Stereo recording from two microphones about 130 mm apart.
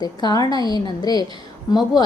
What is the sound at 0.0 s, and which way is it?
A woman's voice, 30° left (ahead or behind).